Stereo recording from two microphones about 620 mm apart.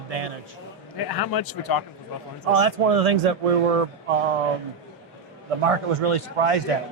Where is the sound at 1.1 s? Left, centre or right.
Left.